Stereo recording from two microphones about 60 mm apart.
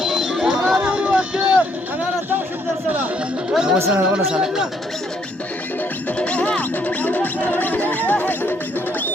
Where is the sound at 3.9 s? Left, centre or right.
Right.